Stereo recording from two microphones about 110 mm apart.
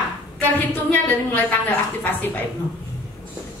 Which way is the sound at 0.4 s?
15° left (ahead or behind).